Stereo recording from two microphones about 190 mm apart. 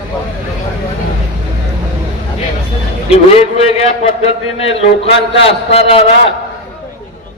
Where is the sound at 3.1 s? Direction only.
30° left (ahead or behind).